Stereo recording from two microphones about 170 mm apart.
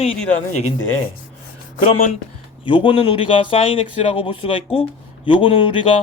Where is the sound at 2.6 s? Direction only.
30° left (ahead or behind).